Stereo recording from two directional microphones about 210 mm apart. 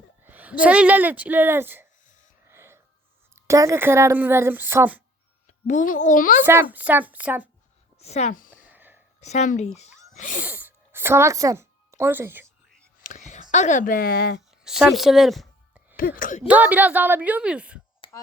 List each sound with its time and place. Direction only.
0.3 s a woman's voice: 10° right (ahead or behind)
2.5 s whispering: 10° right (ahead or behind)
3.3 s a woman's voice: 15° right (ahead or behind)
5.5 s a child's voice: 35° left (ahead or behind)
6.4 s a woman's voice: 10° right (ahead or behind)
7.9 s speech: 30° left (ahead or behind)
8.4 s a sound: 10° right (ahead or behind)
9.2 s speech: 35° left (ahead or behind)
10.3 s a sound: 5° right (ahead or behind)
13.0 s speech: 35° left (ahead or behind)
14.6 s a sound: centre (ahead or behind)
16.0 s speech: 40° left (ahead or behind)
16.5 s a woman's voice: 10° right (ahead or behind)